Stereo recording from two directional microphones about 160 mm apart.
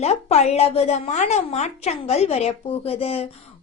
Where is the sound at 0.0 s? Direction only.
40° left (ahead or behind).